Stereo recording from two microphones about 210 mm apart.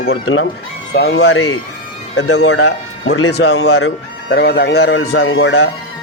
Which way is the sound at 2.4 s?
60° left (ahead or behind).